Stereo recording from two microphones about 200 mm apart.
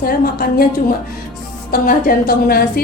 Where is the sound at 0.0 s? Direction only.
50° left (ahead or behind).